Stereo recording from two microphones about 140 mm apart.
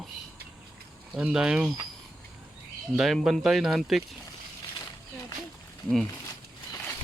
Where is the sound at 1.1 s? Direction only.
5° right (ahead or behind).